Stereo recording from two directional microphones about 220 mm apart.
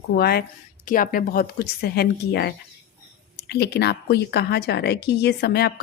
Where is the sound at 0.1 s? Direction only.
45° left (ahead or behind).